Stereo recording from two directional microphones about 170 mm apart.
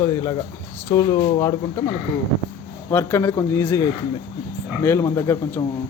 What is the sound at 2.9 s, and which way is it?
Speech, 10° left (ahead or behind).